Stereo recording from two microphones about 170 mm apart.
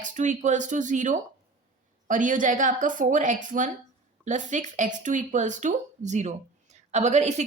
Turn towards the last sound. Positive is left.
turn(degrees=-40)  # may be behind; listen again after turning